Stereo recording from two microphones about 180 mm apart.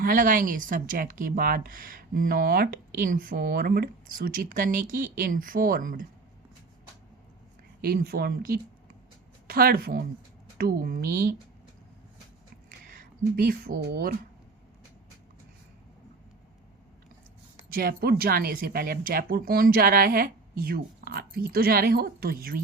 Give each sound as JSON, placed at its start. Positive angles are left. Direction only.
{"t": 0.0, "sound": "a woman's voice", "side_deg": -50}
{"t": 7.8, "sound": "a woman's voice", "side_deg": -55}
{"t": 12.9, "sound": "speech", "side_deg": -55}
{"t": 17.7, "sound": "speech", "side_deg": -55}